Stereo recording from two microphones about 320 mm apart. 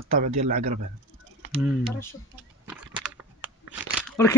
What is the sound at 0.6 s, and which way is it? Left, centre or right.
Speech, right.